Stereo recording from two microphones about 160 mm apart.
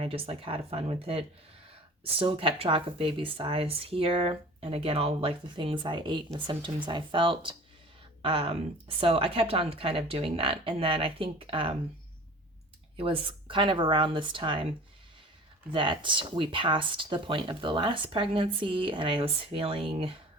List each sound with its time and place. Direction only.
0.0 s speech: 35° right (ahead or behind)
13.0 s speech: 35° right (ahead or behind)
15.7 s speech: 30° right (ahead or behind)